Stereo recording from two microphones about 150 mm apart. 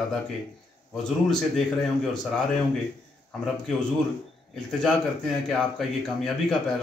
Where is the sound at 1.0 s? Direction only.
5° left (ahead or behind).